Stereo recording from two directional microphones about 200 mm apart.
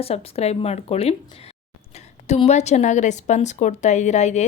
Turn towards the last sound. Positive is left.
turn(degrees=35)  # may be behind; listen again after turning